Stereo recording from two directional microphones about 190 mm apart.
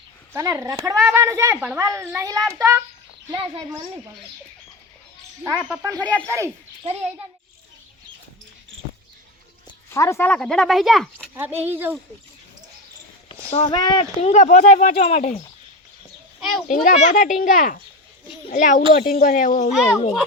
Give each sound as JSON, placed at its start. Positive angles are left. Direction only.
{"t": 0.3, "sound": "a child's voice", "side_deg": -15}
{"t": 3.2, "sound": "speech", "side_deg": -25}
{"t": 5.4, "sound": "a child's voice", "side_deg": -10}
{"t": 6.0, "sound": "speech", "side_deg": 5}
{"t": 6.2, "sound": "a child's voice", "side_deg": -15}
{"t": 9.6, "sound": "speech", "side_deg": 15}
{"t": 11.3, "sound": "a child's voice", "side_deg": -10}
{"t": 13.5, "sound": "speech", "side_deg": 30}
{"t": 16.4, "sound": "a child's voice", "side_deg": 0}
{"t": 16.6, "sound": "speech", "side_deg": 40}